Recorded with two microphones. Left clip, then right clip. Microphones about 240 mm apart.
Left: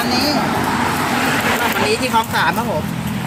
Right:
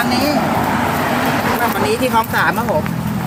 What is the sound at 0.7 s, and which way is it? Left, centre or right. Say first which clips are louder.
Vehicle: right 1 dB; right.